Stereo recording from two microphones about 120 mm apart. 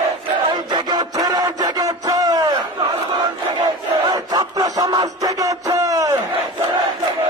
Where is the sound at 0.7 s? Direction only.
35° right (ahead or behind).